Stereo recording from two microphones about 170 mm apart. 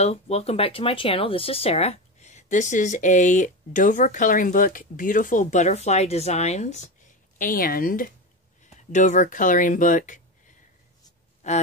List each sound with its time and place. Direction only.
0.0 s speech: 40° left (ahead or behind)
7.3 s speech: 55° left (ahead or behind)
8.7 s speech: 45° left (ahead or behind)
11.4 s gasp: 40° left (ahead or behind)